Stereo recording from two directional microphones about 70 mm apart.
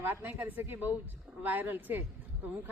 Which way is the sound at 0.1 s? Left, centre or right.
Right.